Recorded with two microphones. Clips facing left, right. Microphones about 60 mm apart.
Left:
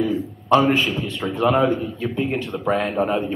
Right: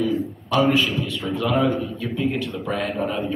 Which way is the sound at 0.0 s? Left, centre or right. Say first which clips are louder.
Even; left.